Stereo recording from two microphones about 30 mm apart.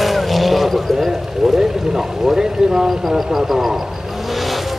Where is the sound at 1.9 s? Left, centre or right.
Centre.